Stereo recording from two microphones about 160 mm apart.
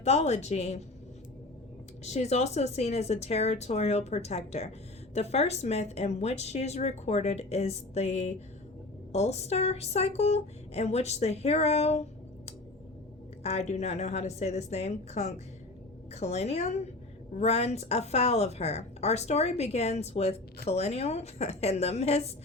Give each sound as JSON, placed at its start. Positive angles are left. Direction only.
{"t": 0.0, "sound": "speech", "side_deg": 45}
{"t": 2.0, "sound": "speech", "side_deg": 45}
{"t": 13.4, "sound": "speech", "side_deg": 40}